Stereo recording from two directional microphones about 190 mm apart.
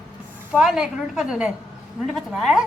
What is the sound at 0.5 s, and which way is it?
A woman's voice, centre (ahead or behind).